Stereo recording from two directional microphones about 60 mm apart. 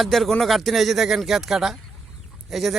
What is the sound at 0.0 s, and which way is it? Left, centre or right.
Speech, centre.